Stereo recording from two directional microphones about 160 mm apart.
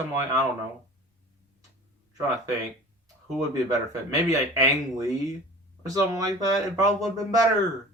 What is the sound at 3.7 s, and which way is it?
Speech, 20° right (ahead or behind).